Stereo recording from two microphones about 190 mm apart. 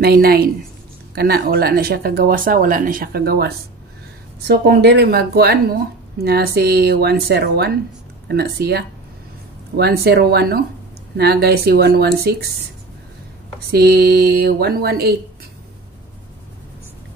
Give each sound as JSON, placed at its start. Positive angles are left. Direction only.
{"t": 0.0, "sound": "speech", "side_deg": -55}
{"t": 13.7, "sound": "speech", "side_deg": -55}